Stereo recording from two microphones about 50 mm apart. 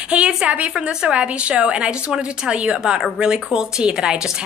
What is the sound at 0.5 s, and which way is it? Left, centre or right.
A woman's voice, right.